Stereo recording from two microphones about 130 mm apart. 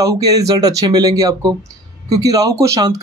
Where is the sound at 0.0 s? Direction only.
25° right (ahead or behind).